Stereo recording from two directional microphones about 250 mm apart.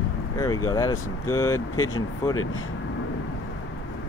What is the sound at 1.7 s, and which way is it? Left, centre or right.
Speech, left.